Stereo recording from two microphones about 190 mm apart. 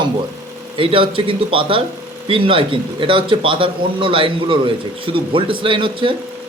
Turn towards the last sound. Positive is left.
turn(degrees=-25)  # may be behind; listen again after turning